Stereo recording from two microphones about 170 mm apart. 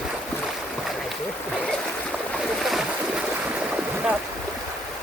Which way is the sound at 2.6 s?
Centre (ahead or behind).